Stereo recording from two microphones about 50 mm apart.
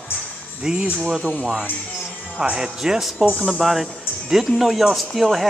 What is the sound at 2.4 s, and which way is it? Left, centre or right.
Speech, centre.